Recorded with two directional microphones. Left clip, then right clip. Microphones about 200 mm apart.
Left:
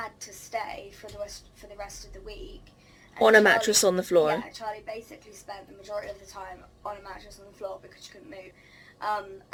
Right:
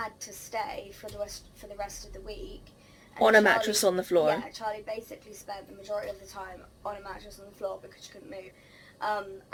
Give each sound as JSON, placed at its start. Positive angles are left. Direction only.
{"t": 0.0, "sound": "a sound", "side_deg": -10}
{"t": 1.8, "sound": "a woman's voice", "side_deg": -15}
{"t": 3.2, "sound": "speech", "side_deg": 25}
{"t": 4.4, "sound": "a woman's voice", "side_deg": -10}